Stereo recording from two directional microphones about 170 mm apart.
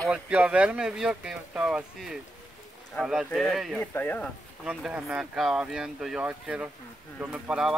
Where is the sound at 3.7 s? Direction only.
10° left (ahead or behind).